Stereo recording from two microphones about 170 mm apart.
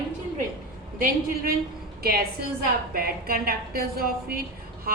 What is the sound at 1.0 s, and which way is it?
A woman's voice, 60° right (ahead or behind).